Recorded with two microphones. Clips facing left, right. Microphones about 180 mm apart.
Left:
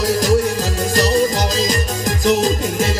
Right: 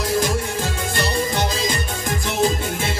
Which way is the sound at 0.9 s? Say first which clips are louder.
Left 7 dB; 40° left (ahead or behind).